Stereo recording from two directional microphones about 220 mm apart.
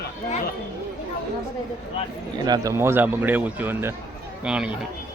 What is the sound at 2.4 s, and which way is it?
Speech, 15° right (ahead or behind).